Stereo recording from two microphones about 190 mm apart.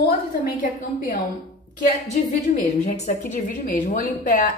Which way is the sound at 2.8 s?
45° left (ahead or behind).